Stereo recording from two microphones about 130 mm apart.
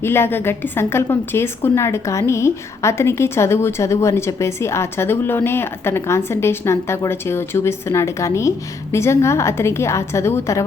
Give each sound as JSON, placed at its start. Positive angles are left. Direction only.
{"t": 0.0, "sound": "a woman's voice", "side_deg": 20}